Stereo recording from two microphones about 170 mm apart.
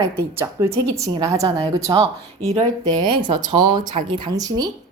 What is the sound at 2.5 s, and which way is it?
Speech, 30° right (ahead or behind).